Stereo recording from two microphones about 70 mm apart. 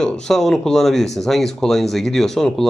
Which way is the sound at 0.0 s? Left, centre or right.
Centre.